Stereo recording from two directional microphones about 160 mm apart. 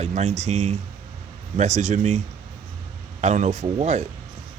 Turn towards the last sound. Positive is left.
turn(degrees=-45)  # may be behind; listen again after turning